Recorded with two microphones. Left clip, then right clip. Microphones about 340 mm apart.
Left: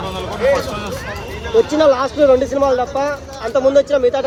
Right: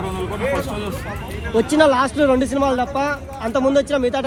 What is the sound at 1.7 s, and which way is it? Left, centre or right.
Speech, right.